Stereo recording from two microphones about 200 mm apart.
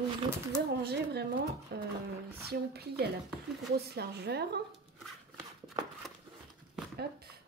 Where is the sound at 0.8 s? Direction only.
55° right (ahead or behind).